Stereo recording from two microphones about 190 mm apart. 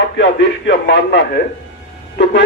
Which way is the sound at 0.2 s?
70° left (ahead or behind).